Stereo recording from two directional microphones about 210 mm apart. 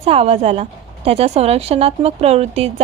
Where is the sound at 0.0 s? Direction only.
30° right (ahead or behind).